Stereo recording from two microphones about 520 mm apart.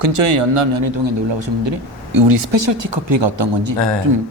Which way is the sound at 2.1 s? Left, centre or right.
Right.